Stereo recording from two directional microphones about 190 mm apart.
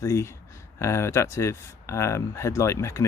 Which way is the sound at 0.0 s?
15° left (ahead or behind).